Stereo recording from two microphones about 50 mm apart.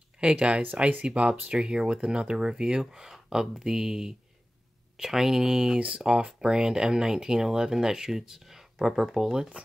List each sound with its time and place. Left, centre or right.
0.2 s speech: right
1.5 s speech: centre